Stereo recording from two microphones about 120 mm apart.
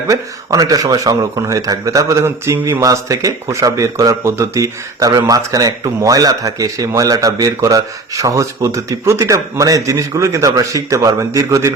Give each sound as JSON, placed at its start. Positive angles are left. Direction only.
{"t": 0.1, "sound": "speech", "side_deg": -30}